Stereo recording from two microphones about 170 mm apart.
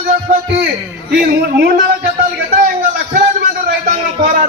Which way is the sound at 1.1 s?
60° right (ahead or behind).